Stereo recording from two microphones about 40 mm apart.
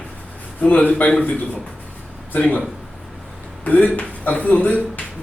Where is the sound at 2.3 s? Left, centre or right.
Left.